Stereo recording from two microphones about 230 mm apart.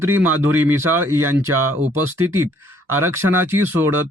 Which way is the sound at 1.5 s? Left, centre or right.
Right.